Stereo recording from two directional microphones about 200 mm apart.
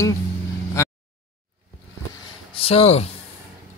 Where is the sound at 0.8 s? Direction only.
15° left (ahead or behind).